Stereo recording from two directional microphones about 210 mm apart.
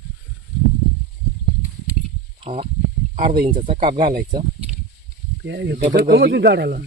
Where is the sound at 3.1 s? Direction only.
40° right (ahead or behind).